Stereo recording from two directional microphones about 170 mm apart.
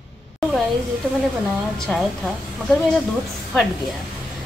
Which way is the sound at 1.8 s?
Centre (ahead or behind).